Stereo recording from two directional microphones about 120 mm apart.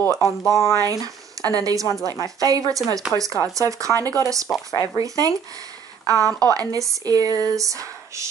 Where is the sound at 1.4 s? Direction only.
30° right (ahead or behind).